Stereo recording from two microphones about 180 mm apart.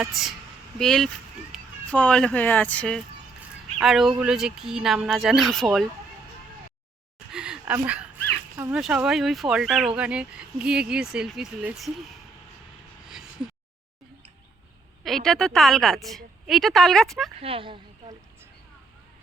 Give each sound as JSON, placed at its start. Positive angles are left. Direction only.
{"t": 0.0, "sound": "a woman's voice", "side_deg": 0}
{"t": 1.5, "sound": "a sound", "side_deg": -5}
{"t": 1.9, "sound": "a woman's voice", "side_deg": 5}
{"t": 7.3, "sound": "a sound", "side_deg": -5}
{"t": 8.7, "sound": "a woman's voice", "side_deg": -5}
{"t": 15.0, "sound": "a woman's voice", "side_deg": 0}
{"t": 17.4, "sound": "a woman's voice", "side_deg": -30}